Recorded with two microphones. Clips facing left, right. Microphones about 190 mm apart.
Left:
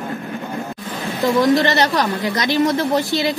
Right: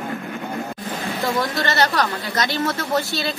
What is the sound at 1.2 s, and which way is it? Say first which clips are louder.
Speech: left 9 dB; 20° left (ahead or behind).